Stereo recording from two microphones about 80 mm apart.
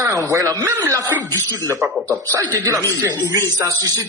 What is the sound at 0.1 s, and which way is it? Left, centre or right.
A man's voice, right.